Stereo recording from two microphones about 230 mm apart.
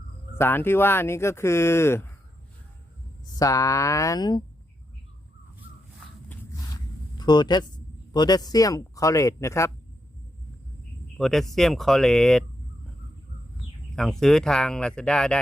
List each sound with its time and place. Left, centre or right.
0.3 s speech: centre
3.3 s speech: centre
6.2 s a sound: centre
11.2 s speech: centre
13.9 s speech: centre